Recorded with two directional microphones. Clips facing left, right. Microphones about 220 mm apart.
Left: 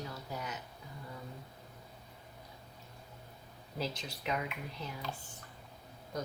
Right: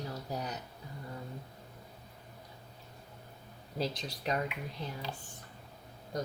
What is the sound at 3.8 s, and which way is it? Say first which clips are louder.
Speech: right 3 dB; 35° right (ahead or behind).